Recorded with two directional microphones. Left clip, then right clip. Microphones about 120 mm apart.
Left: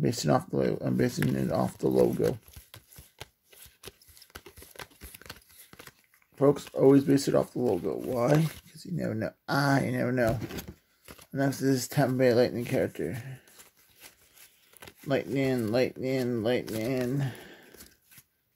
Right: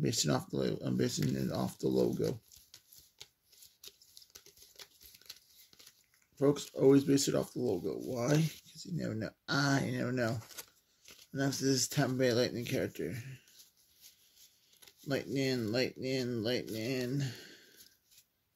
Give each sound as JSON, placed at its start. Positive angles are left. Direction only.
{"t": 0.0, "sound": "speech", "side_deg": 40}
{"t": 2.2, "sound": "a sound", "side_deg": 55}
{"t": 3.8, "sound": "crumpling", "side_deg": 55}
{"t": 6.4, "sound": "speech", "side_deg": 40}
{"t": 15.3, "sound": "speech", "side_deg": 30}
{"t": 17.1, "sound": "speech", "side_deg": 35}